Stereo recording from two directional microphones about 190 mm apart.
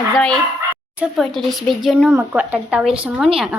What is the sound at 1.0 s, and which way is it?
Speech, centre (ahead or behind).